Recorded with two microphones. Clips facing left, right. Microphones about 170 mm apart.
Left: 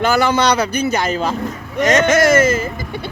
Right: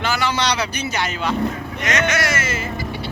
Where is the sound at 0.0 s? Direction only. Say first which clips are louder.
Left 7 dB; 50° left (ahead or behind).